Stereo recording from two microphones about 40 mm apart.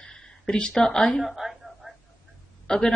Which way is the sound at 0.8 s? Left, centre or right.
Centre.